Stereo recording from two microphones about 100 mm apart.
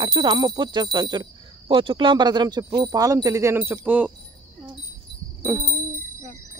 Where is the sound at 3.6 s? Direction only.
15° right (ahead or behind).